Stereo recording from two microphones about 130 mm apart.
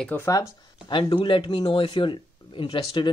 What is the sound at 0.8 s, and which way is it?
Speech, 35° left (ahead or behind).